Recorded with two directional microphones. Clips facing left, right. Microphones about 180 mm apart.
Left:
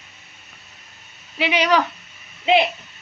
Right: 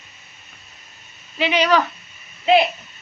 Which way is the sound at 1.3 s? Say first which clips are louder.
Right 1 dB; 10° left (ahead or behind).